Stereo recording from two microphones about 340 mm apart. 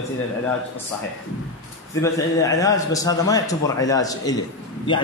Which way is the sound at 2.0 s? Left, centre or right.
Centre.